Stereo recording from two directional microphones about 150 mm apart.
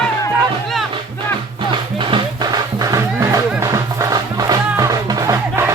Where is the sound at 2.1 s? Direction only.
25° right (ahead or behind).